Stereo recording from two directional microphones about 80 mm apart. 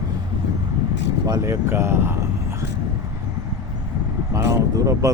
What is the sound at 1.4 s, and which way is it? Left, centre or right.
Speech, right.